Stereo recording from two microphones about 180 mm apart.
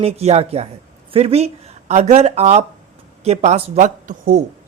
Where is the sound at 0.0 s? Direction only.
35° right (ahead or behind).